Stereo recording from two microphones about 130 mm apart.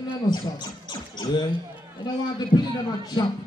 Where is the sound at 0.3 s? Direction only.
35° left (ahead or behind).